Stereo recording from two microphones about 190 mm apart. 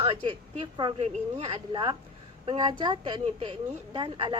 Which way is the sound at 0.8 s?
30° right (ahead or behind).